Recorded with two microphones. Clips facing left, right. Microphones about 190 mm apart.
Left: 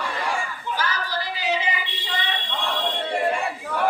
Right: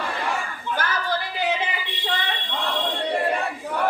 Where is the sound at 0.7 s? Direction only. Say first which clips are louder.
Right 2 dB; 55° right (ahead or behind).